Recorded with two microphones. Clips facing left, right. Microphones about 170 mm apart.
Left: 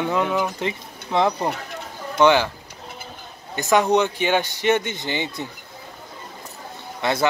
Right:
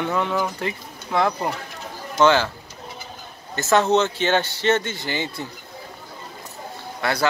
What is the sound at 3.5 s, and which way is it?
A man's voice, 15° left (ahead or behind).